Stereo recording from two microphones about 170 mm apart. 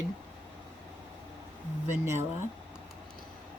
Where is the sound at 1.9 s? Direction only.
15° right (ahead or behind).